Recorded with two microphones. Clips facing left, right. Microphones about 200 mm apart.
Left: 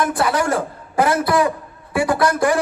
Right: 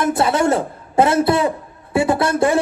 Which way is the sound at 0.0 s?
25° right (ahead or behind).